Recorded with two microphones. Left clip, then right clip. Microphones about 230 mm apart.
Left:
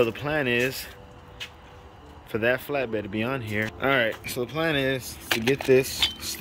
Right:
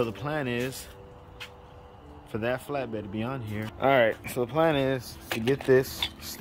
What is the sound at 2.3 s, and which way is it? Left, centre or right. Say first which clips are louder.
Speech: left 5 dB; centre.